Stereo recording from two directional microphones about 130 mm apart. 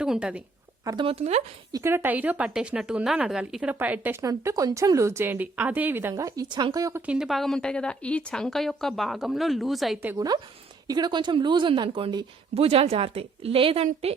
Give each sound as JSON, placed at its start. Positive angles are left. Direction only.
{"t": 0.0, "sound": "a woman's voice", "side_deg": -5}
{"t": 1.0, "sound": "speech", "side_deg": -55}
{"t": 1.7, "sound": "speech", "side_deg": -20}
{"t": 4.2, "sound": "speech", "side_deg": -25}
{"t": 7.0, "sound": "speech", "side_deg": -5}
{"t": 10.2, "sound": "speech", "side_deg": -30}